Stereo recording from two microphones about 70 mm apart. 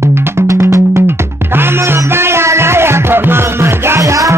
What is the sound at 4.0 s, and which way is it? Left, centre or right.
Music, right.